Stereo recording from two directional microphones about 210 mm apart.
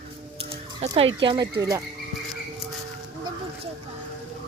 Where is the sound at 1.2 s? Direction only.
20° right (ahead or behind).